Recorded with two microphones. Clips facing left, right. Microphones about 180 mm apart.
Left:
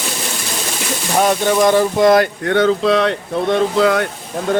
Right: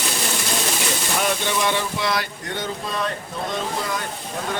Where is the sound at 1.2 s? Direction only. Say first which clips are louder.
Left 11 dB; 45° left (ahead or behind); by 4.1 s 70° left (ahead or behind).